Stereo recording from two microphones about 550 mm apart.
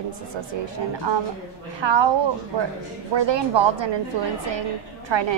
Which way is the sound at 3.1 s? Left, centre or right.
Right.